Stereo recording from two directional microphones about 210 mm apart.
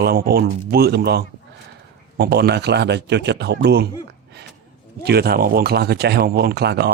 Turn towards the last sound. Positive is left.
turn(degrees=-50)  # may be behind; listen again after turning